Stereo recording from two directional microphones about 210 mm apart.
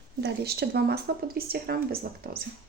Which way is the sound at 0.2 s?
50° right (ahead or behind).